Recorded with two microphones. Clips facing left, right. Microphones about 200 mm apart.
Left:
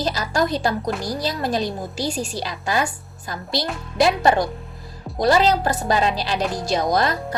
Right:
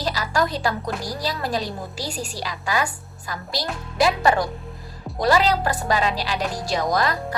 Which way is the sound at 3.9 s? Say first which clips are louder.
Left 2 dB; 25° left (ahead or behind).